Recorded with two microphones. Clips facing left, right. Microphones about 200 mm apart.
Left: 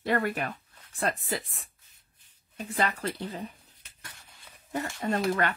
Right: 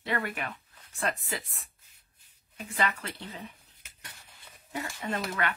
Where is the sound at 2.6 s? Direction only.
35° left (ahead or behind).